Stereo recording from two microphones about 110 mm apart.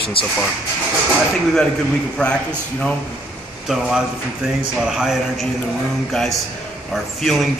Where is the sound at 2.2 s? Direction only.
10° left (ahead or behind).